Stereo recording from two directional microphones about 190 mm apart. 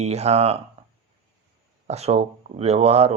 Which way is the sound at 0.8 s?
30° right (ahead or behind).